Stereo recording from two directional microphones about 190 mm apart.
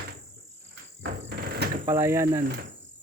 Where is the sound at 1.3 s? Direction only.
50° right (ahead or behind).